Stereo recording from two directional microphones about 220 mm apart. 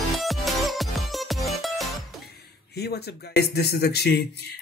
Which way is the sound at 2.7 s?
45° left (ahead or behind).